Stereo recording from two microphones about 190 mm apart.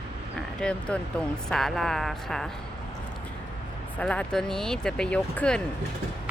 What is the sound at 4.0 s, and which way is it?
Speech, 5° left (ahead or behind).